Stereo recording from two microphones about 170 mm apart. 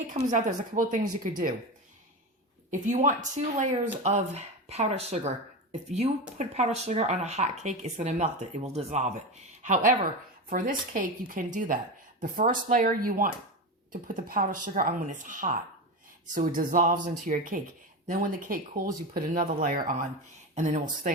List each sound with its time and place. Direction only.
0.1 s speech: 45° right (ahead or behind)
2.6 s speech: 45° right (ahead or behind)
6.4 s speech: 40° right (ahead or behind)